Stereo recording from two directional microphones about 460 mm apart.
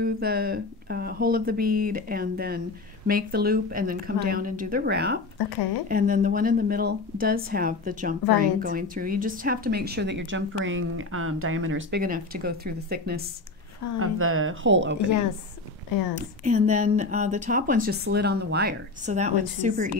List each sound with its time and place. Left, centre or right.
0.0 s speech: centre
16.4 s speech: centre